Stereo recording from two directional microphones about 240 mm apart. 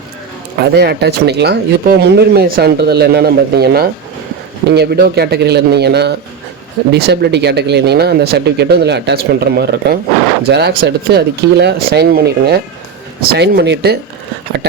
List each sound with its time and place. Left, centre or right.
0.6 s speech: right